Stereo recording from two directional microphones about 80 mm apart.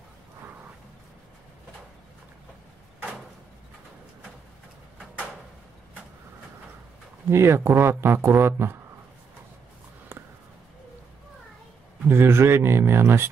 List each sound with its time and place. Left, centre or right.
7.2 s a man's voice: right
12.1 s a man's voice: right